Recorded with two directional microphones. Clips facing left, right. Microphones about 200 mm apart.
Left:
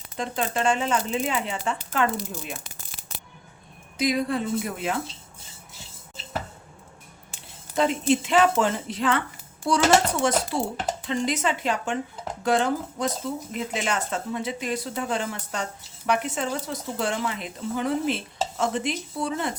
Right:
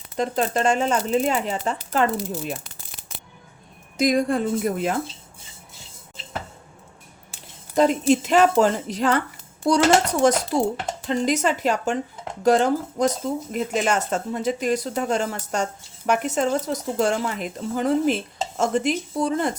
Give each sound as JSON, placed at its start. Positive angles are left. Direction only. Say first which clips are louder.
{"t": 0.2, "sound": "speech", "louder": "right 4 dB", "side_deg": -40}
{"t": 3.9, "sound": "speech", "louder": "right 4 dB", "side_deg": -45}
{"t": 7.8, "sound": "speech", "louder": "right 4 dB", "side_deg": -40}